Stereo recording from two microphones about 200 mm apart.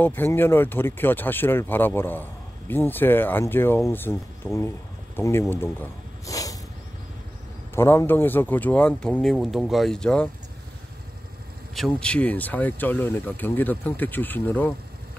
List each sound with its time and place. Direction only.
0.0 s speech: 10° left (ahead or behind)
5.1 s snake: 15° left (ahead or behind)
7.7 s speech: 10° left (ahead or behind)
11.7 s speech: 5° left (ahead or behind)